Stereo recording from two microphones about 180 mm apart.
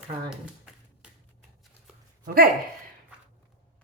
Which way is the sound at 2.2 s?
55° right (ahead or behind).